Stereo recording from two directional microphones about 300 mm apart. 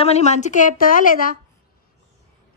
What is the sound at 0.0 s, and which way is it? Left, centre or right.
A woman's voice, left.